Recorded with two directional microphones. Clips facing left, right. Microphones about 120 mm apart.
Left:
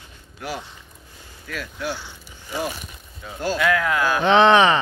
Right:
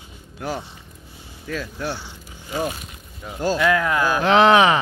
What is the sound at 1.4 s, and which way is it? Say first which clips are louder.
Speech: right 2 dB; 30° right (ahead or behind).